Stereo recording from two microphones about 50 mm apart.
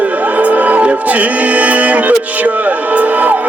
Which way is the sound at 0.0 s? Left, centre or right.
Right.